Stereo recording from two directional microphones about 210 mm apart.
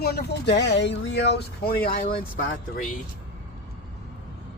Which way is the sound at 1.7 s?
45° left (ahead or behind).